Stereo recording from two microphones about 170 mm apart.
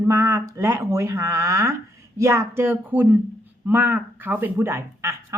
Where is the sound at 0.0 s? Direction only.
15° right (ahead or behind).